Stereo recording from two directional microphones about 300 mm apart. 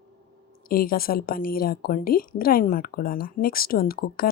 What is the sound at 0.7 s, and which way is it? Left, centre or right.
A woman's voice, left.